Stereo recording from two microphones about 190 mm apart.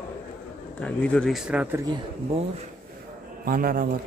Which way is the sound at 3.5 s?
45° right (ahead or behind).